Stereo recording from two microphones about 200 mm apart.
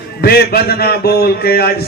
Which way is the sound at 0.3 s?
50° left (ahead or behind).